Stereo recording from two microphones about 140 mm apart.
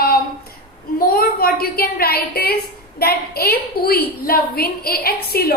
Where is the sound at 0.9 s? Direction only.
90° left.